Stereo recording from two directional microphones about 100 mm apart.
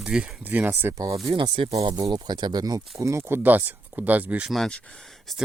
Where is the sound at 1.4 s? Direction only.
50° right (ahead or behind); by 4.5 s 15° right (ahead or behind).